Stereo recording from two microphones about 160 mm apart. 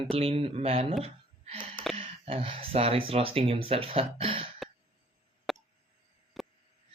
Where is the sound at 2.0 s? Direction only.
35° right (ahead or behind).